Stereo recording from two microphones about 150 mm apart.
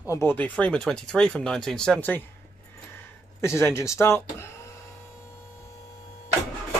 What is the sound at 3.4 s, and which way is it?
Speech, 20° left (ahead or behind).